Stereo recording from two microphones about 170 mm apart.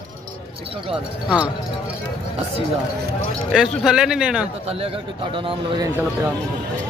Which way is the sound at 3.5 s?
5° right (ahead or behind).